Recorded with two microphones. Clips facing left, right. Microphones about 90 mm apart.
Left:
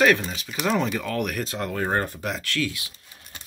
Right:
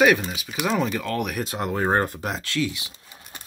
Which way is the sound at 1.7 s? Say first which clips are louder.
Right 5 dB; 30° right (ahead or behind).